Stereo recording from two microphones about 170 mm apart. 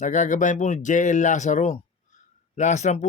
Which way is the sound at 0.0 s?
45° left (ahead or behind).